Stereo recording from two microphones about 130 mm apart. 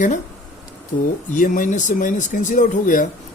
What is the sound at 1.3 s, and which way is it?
Speech, 85° left.